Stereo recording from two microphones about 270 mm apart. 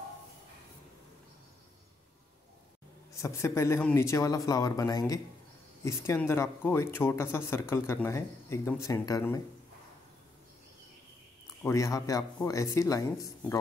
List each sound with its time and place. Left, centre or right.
3.1 s speech: centre
11.6 s speech: centre